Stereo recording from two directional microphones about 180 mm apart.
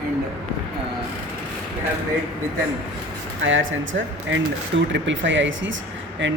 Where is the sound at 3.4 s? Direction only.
90° right.